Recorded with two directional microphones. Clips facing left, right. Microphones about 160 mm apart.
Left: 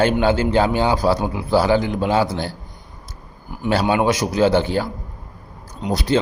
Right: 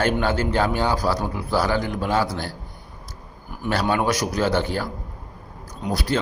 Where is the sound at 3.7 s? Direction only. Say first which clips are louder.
Left 4 dB; 25° left (ahead or behind).